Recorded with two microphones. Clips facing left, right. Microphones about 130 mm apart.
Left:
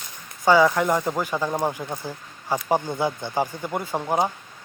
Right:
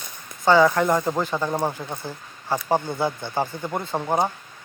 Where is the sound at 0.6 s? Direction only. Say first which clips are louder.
Right 1 dB; 10° left (ahead or behind).